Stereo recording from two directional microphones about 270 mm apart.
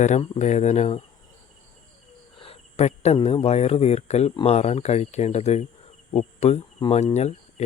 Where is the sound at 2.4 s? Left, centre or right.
Left.